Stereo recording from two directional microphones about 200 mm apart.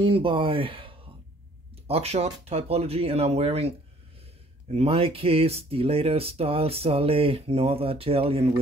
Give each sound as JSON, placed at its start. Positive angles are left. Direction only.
{"t": 0.0, "sound": "speech", "side_deg": -25}